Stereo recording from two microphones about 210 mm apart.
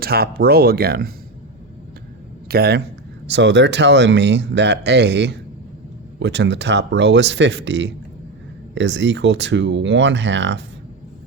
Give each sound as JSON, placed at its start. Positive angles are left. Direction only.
{"t": 0.0, "sound": "speech", "side_deg": -45}
{"t": 2.5, "sound": "speech", "side_deg": -50}